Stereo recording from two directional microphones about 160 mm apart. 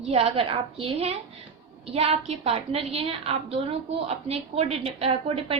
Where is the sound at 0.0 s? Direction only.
40° right (ahead or behind).